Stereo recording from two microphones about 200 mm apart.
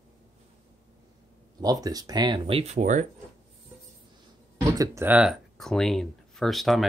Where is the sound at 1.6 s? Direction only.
20° right (ahead or behind); by 3.0 s 40° right (ahead or behind).